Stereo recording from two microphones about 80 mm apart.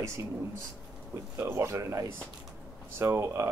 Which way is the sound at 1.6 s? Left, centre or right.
Right.